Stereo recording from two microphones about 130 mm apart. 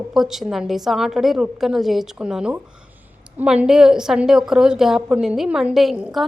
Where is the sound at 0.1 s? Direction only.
Centre (ahead or behind).